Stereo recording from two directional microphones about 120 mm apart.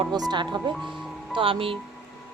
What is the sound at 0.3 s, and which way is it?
Speech, 35° right (ahead or behind).